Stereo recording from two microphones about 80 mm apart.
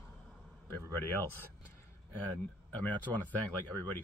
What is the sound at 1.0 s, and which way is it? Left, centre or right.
Speech, left.